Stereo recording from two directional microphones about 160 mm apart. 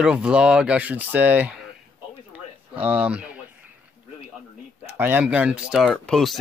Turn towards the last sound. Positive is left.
turn(degrees=0)  # may be behind; listen again after turning